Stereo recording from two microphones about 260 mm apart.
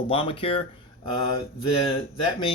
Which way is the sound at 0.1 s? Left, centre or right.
Centre.